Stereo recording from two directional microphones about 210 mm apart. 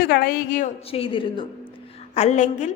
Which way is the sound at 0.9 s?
25° left (ahead or behind).